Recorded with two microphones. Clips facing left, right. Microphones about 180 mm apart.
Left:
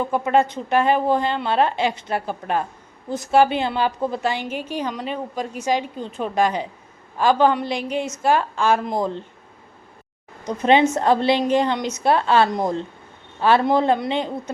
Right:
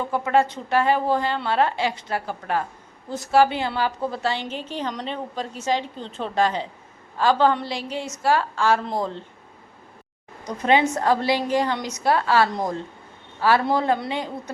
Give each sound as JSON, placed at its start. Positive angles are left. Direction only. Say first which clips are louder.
{"t": 0.0, "sound": "a woman's voice", "louder": "left 2 dB", "side_deg": 20}
{"t": 10.4, "sound": "a woman's voice", "louder": "left 3 dB", "side_deg": 20}